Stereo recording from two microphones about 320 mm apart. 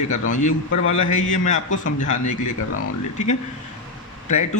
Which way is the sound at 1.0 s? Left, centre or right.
Left.